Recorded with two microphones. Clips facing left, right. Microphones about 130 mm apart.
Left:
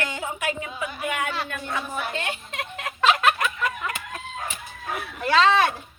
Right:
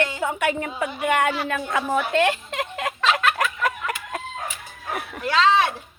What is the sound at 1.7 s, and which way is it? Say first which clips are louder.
Speech: right 8 dB; 90° right.